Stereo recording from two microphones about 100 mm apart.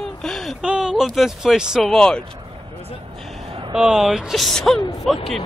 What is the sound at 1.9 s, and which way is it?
Speech, 5° left (ahead or behind).